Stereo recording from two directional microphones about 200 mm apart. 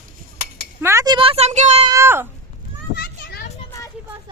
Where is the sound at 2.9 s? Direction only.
50° left (ahead or behind).